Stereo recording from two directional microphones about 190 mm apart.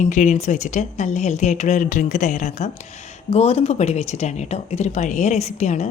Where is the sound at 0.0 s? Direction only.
40° left (ahead or behind).